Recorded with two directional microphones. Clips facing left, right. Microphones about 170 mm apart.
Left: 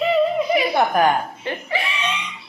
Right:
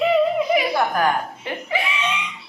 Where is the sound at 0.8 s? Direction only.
25° left (ahead or behind).